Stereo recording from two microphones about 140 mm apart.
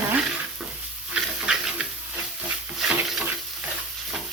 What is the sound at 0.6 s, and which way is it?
Stir, 5° right (ahead or behind).